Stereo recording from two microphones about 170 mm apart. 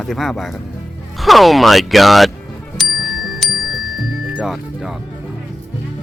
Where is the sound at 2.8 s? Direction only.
Centre (ahead or behind).